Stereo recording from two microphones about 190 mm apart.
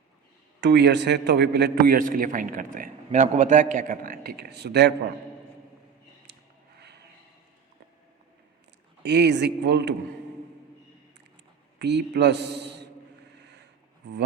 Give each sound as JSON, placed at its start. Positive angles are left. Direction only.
{"t": 0.6, "sound": "a man's voice", "side_deg": -65}
{"t": 9.0, "sound": "a man's voice", "side_deg": -60}
{"t": 11.8, "sound": "a man's voice", "side_deg": -60}